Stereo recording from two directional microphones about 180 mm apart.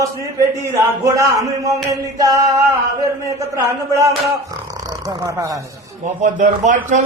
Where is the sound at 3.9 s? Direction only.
15° right (ahead or behind).